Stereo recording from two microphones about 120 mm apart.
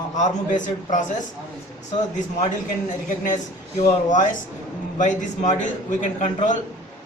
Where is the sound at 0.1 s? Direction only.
85° left.